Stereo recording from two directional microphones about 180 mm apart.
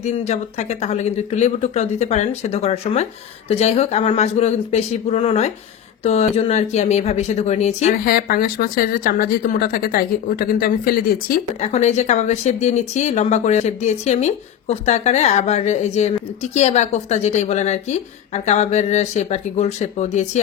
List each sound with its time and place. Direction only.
0.0 s a woman's voice: 40° left (ahead or behind)
8.0 s speech: 55° left (ahead or behind)
11.7 s a woman's voice: 40° left (ahead or behind)